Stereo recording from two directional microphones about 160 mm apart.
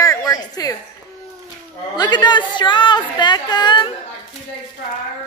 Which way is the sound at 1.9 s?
25° left (ahead or behind).